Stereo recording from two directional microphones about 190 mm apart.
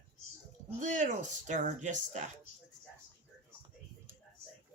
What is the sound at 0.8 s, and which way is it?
Speech, 40° right (ahead or behind).